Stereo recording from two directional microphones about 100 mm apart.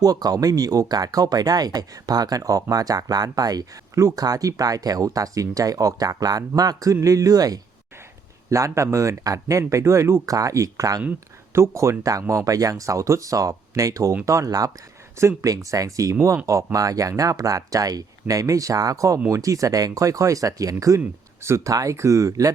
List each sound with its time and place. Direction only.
0.0 s speech: 40° right (ahead or behind)